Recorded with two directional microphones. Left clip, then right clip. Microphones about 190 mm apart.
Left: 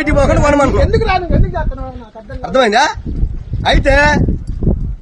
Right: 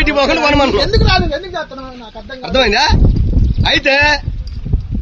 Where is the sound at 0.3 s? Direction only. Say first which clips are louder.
Even; 5° left (ahead or behind).